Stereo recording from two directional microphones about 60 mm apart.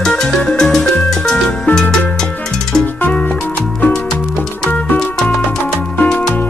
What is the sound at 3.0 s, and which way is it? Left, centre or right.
Music, left.